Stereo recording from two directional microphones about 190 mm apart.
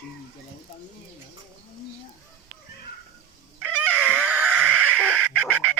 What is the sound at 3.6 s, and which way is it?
Cat, 10° right (ahead or behind).